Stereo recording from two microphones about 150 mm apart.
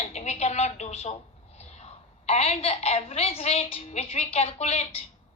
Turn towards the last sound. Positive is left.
turn(degrees=45)  # may be behind; listen again after turning